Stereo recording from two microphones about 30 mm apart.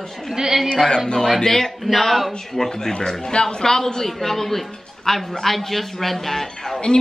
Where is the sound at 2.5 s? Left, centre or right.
Centre.